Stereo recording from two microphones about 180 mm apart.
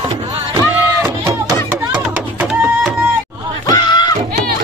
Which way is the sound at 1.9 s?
5° right (ahead or behind).